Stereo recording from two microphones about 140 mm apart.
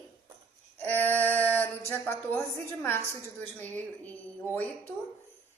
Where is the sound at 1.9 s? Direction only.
15° left (ahead or behind).